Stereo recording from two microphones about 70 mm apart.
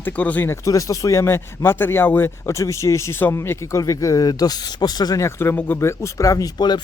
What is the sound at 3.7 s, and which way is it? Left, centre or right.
Speech, left.